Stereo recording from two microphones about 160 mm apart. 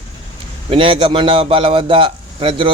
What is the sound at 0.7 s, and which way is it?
A man's voice, 35° right (ahead or behind).